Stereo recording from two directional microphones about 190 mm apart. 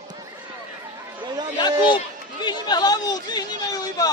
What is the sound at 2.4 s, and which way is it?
Speech, 20° left (ahead or behind).